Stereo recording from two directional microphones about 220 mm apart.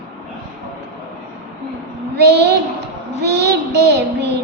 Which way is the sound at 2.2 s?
50° right (ahead or behind).